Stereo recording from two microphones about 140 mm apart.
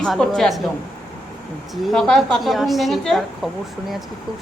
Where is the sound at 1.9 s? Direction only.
5° left (ahead or behind).